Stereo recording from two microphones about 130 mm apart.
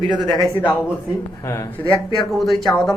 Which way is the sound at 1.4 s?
20° left (ahead or behind).